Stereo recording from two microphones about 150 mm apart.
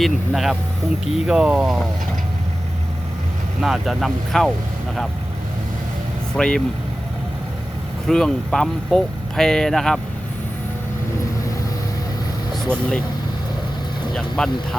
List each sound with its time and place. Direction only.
0.0 s speech: centre (ahead or behind)
3.6 s speech: centre (ahead or behind)
6.3 s speech: 5° left (ahead or behind)
8.0 s speech: 5° left (ahead or behind)
14.1 s speech: centre (ahead or behind)